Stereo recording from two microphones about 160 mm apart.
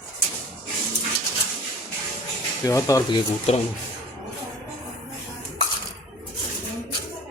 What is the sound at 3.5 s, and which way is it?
Speech, 40° left (ahead or behind).